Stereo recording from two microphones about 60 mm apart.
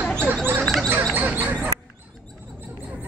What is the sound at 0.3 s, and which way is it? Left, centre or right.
Rodents, right.